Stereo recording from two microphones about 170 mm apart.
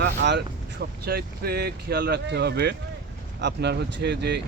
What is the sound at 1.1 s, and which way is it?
Speech, 65° right (ahead or behind).